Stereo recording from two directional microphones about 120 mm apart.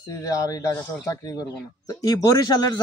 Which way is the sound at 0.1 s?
30° left (ahead or behind).